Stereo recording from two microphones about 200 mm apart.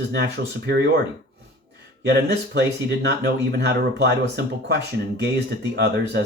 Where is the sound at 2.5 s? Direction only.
55° right (ahead or behind).